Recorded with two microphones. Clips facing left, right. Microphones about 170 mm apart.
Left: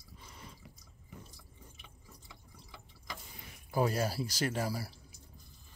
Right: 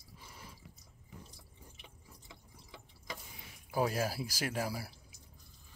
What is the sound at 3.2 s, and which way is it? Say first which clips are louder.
Speech: left 1 dB; 5° right (ahead or behind).